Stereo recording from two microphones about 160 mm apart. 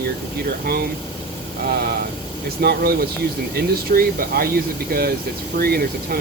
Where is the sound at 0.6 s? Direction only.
70° right (ahead or behind).